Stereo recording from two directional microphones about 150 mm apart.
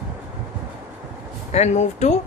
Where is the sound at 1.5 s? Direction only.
50° left (ahead or behind).